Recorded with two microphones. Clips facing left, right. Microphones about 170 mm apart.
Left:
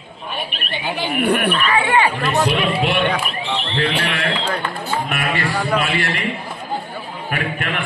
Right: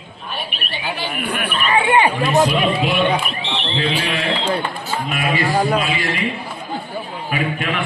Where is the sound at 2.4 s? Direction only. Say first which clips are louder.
Right 1 dB; 70° left (ahead or behind).